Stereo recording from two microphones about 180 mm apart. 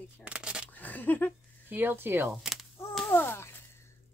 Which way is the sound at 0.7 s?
10° left (ahead or behind).